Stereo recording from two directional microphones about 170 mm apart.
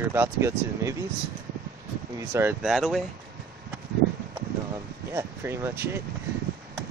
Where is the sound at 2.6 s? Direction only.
Centre (ahead or behind).